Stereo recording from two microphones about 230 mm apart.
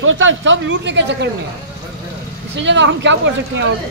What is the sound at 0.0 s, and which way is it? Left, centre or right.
Speech, right.